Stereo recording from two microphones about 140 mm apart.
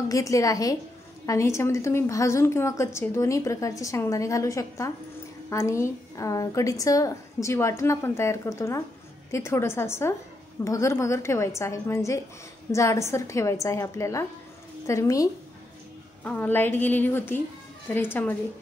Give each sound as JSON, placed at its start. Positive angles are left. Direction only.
{"t": 0.1, "sound": "a woman's voice", "side_deg": 25}
{"t": 16.3, "sound": "a woman's voice", "side_deg": 15}